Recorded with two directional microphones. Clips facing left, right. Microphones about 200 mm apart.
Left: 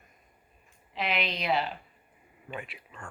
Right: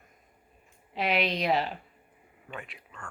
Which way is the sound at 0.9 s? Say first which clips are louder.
Right 4 dB; 40° right (ahead or behind).